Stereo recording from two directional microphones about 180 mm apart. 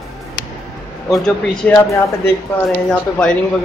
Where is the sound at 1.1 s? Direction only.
5° left (ahead or behind).